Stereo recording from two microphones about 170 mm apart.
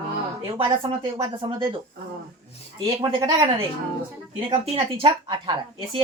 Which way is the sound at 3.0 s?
25° right (ahead or behind).